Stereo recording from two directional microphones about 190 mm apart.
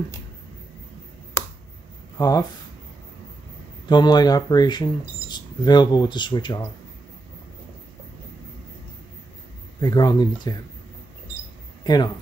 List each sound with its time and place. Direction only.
2.1 s speech: 20° left (ahead or behind)
3.9 s speech: 20° left (ahead or behind)
9.8 s speech: 20° left (ahead or behind)
11.8 s speech: 20° left (ahead or behind)